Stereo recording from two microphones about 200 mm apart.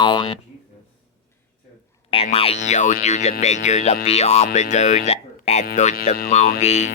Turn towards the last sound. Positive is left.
turn(degrees=35)  # may be behind; listen again after turning